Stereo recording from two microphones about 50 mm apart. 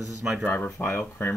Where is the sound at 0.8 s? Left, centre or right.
Left.